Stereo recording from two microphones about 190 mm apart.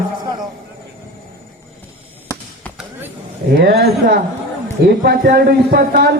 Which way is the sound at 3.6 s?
60° right (ahead or behind).